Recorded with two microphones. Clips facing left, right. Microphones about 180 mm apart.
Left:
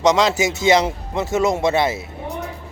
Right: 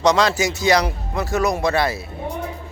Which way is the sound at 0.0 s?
20° left (ahead or behind).